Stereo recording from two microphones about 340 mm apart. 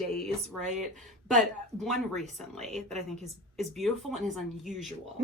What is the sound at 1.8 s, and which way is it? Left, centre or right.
Speech, centre.